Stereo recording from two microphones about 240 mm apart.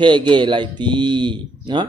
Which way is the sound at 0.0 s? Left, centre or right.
Centre.